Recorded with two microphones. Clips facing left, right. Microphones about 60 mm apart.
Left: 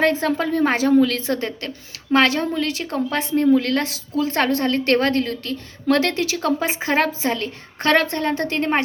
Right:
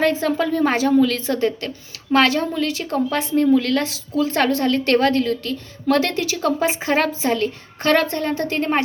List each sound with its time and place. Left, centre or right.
0.0 s a woman's voice: left
0.3 s a woman's voice: left
3.3 s a woman's voice: left
6.7 s a woman's voice: left
7.8 s a woman's voice: left